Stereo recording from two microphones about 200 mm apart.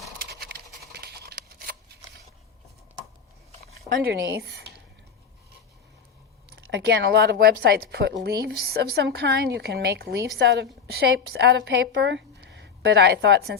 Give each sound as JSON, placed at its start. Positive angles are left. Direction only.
{"t": 0.3, "sound": "a sound", "side_deg": -50}
{"t": 3.8, "sound": "speech", "side_deg": -55}
{"t": 6.6, "sound": "a woman's voice", "side_deg": -60}